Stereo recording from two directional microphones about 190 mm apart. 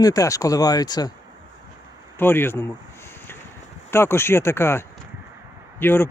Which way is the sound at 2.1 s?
10° left (ahead or behind).